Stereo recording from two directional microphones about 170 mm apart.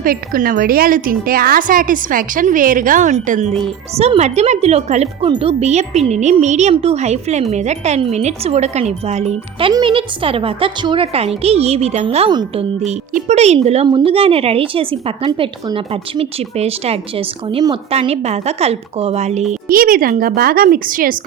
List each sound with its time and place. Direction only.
0.0 s speech: 55° right (ahead or behind)
3.6 s speech: 35° right (ahead or behind)
12.8 s speech: 45° right (ahead or behind)